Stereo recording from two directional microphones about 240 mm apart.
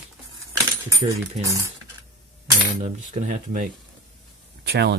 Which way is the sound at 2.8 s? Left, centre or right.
Right.